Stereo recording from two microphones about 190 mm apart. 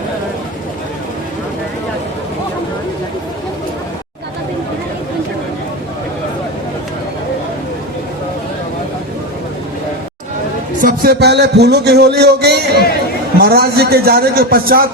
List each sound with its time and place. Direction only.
10.8 s a man's voice: 50° right (ahead or behind)